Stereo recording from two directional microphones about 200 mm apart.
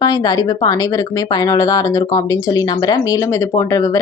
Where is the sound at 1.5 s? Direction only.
15° left (ahead or behind).